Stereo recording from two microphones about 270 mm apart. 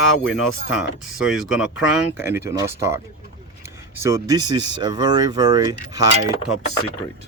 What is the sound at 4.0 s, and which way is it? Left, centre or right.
Speech, centre.